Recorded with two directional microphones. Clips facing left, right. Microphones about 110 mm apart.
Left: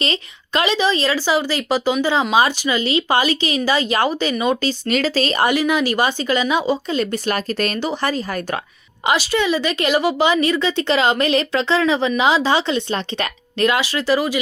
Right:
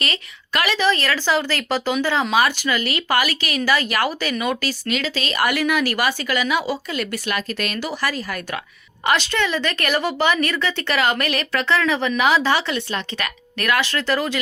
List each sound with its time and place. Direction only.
0.0 s a woman's voice: 25° left (ahead or behind)
4.9 s a woman's voice: 40° left (ahead or behind)
5.5 s a woman's voice: 20° left (ahead or behind)
9.0 s a woman's voice: 10° left (ahead or behind)